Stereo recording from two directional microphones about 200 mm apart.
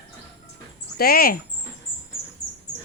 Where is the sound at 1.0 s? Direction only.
50° left (ahead or behind).